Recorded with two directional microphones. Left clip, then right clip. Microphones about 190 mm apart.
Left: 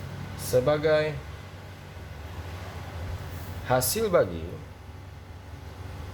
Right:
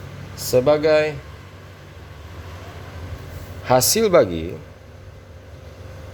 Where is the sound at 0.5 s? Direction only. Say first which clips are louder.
Right 7 dB; 40° right (ahead or behind).